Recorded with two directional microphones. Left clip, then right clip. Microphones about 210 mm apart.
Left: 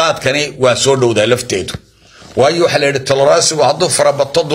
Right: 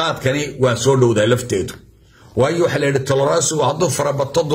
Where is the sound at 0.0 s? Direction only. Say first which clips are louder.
Left 6 dB; 15° right (ahead or behind).